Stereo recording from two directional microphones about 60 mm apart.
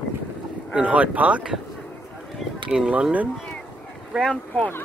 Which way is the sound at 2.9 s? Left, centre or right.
Centre.